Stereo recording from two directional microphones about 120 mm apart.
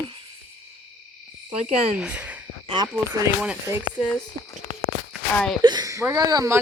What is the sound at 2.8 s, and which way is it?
Speech, 35° right (ahead or behind).